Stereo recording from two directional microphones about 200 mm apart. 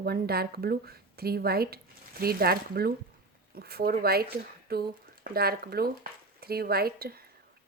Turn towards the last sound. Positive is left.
turn(degrees=-50)  # may be behind; listen again after turning